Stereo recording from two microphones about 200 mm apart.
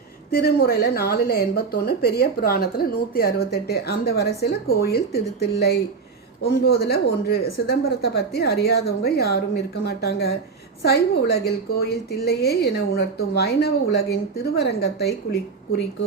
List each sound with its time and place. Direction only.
0.3 s speech: 50° left (ahead or behind)